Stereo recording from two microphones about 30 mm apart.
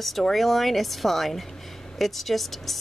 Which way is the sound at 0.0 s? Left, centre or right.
Centre.